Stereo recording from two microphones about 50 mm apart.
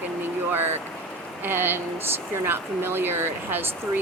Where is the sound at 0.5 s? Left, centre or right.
Right.